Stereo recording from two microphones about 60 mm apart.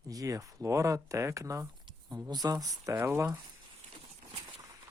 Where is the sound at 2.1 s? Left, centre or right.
Right.